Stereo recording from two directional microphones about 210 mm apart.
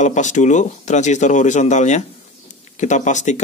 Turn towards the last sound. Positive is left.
turn(degrees=35)  # may be behind; listen again after turning